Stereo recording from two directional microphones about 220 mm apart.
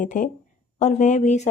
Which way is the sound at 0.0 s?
35° left (ahead or behind).